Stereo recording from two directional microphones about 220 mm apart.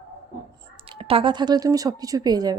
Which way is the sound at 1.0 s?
25° right (ahead or behind).